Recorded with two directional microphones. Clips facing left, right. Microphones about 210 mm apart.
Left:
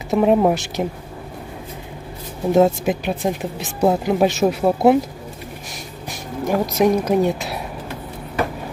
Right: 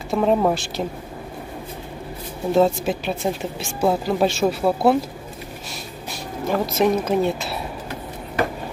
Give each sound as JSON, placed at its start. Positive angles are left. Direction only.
{"t": 0.1, "sound": "a woman's voice", "side_deg": 15}
{"t": 2.5, "sound": "a woman's voice", "side_deg": 20}
{"t": 6.0, "sound": "speech", "side_deg": 15}